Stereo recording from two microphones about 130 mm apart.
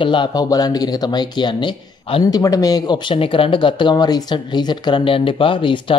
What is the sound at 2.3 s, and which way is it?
Speech, 25° left (ahead or behind).